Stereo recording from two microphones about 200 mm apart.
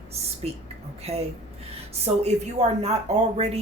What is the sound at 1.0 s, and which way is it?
Speech, 30° right (ahead or behind).